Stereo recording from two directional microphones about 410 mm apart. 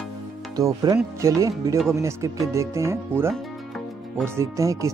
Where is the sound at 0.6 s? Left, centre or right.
Centre.